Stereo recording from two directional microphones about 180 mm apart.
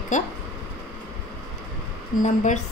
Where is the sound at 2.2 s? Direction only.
40° left (ahead or behind).